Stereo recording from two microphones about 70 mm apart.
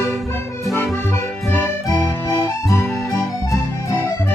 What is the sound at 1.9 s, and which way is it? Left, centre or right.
Music, left.